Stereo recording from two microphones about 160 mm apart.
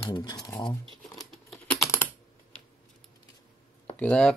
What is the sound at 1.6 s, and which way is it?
Typing, 10° left (ahead or behind).